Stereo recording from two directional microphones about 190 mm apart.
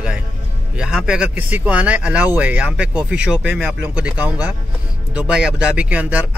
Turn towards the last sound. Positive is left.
turn(degrees=-10)  # may be behind; listen again after turning